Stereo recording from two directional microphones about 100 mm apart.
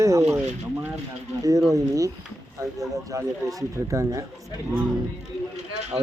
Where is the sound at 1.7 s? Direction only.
35° right (ahead or behind).